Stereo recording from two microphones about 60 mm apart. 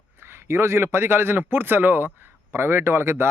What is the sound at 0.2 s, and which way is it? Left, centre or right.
A man's voice, right.